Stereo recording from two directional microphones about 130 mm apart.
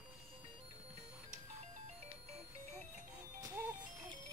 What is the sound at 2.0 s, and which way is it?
Music, 55° right (ahead or behind).